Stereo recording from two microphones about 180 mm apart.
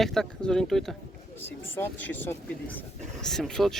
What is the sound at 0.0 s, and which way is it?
Speech, 5° left (ahead or behind).